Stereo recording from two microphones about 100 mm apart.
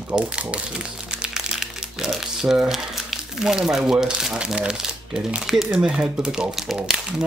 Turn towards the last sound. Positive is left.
turn(degrees=-5)  # may be behind; listen again after turning